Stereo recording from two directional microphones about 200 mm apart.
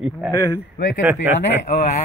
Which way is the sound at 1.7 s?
35° left (ahead or behind).